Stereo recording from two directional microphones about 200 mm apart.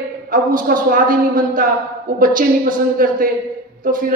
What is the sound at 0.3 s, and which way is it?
A man's voice, 45° right (ahead or behind).